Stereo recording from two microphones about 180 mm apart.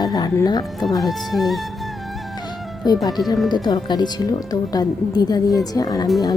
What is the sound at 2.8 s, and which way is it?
Speech, 20° left (ahead or behind).